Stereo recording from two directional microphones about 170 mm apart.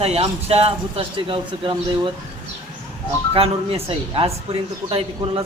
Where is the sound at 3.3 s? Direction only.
35° right (ahead or behind).